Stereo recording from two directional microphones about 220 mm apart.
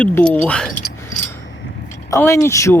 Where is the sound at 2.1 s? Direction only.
10° left (ahead or behind).